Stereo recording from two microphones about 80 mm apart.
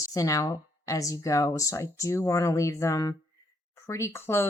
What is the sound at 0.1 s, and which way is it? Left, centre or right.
Speech, left.